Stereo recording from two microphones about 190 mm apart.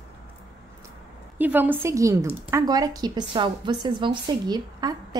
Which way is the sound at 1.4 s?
10° right (ahead or behind).